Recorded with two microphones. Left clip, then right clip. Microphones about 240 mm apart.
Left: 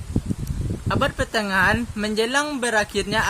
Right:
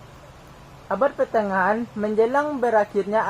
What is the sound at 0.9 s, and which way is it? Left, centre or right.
Speech, left.